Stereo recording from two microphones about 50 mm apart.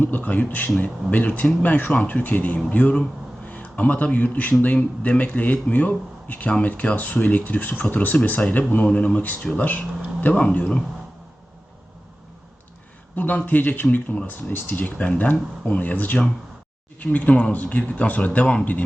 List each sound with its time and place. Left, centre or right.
0.0 s speech: left
13.1 s speech: left